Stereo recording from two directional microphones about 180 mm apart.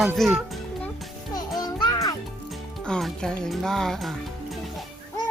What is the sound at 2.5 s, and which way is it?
Music, 5° left (ahead or behind).